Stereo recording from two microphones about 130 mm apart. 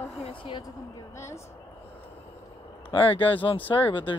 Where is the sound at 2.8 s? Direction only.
40° left (ahead or behind).